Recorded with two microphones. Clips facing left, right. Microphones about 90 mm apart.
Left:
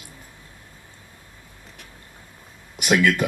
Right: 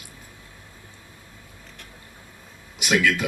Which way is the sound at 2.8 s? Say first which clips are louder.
Left 3 dB; 55° left (ahead or behind).